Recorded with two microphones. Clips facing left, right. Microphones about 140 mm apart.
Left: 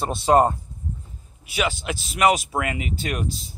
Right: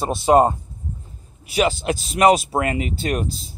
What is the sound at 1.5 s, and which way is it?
Speech, 35° right (ahead or behind).